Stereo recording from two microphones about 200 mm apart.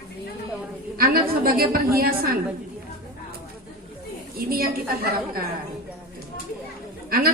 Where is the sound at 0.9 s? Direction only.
50° right (ahead or behind).